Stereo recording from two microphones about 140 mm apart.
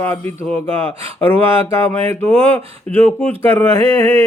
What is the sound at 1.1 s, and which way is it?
Speech, 15° left (ahead or behind).